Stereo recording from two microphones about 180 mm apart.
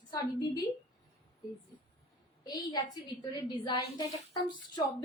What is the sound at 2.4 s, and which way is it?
A woman's voice, 20° left (ahead or behind).